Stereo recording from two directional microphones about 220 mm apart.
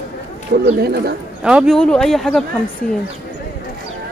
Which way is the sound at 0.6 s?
45° right (ahead or behind).